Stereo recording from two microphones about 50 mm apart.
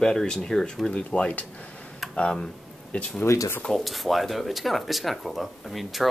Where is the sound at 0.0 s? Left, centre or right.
Centre.